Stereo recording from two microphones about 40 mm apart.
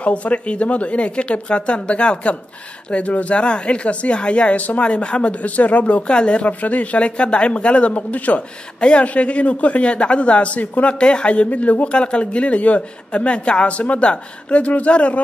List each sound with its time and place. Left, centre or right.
0.0 s speech: left
6.6 s speech: left
8.7 s speech: left